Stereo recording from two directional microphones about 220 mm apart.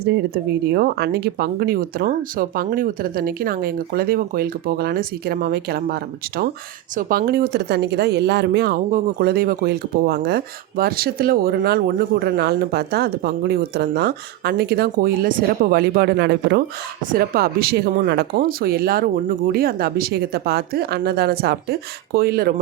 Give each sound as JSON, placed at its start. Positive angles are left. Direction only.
{"t": 0.0, "sound": "speech", "side_deg": -45}